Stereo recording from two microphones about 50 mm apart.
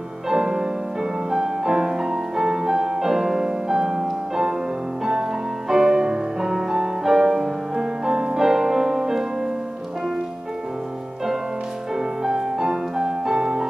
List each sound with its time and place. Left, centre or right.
0.3 s music: centre
5.7 s music: centre
12.2 s music: centre